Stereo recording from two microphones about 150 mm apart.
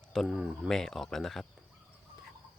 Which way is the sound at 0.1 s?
Centre (ahead or behind).